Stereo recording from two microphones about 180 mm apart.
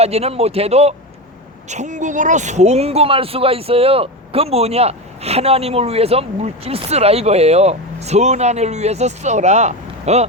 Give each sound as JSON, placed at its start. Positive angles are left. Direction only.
{"t": 0.0, "sound": "speech", "side_deg": -35}